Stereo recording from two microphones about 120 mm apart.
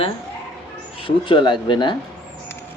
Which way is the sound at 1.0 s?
45° left (ahead or behind).